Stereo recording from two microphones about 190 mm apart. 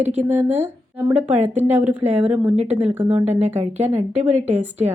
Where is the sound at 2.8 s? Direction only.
35° right (ahead or behind).